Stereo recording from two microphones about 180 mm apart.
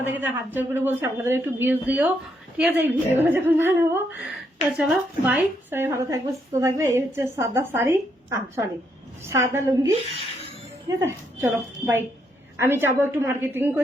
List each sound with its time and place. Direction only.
0.0 s a woman's voice: 10° right (ahead or behind)